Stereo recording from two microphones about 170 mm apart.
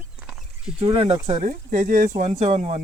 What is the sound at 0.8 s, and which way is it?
Speech, 35° right (ahead or behind).